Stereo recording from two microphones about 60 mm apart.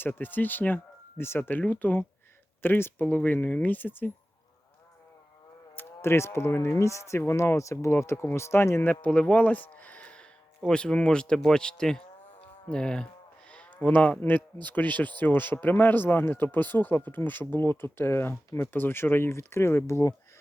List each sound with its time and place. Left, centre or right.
0.0 s speech: left
2.6 s speech: left
5.7 s speech: left
8.9 s speech: left
13.5 s sheep: left
14.2 s speech: left